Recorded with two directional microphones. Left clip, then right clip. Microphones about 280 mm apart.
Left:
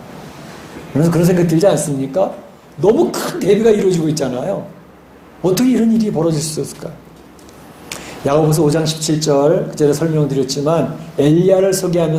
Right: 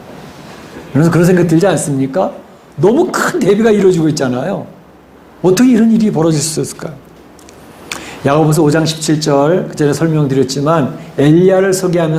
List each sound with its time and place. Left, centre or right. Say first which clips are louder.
0.9 s a man's voice: right 4 dB; right
7.9 s a man's voice: right 4 dB; right